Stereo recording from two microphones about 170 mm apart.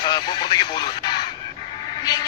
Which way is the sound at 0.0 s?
25° left (ahead or behind).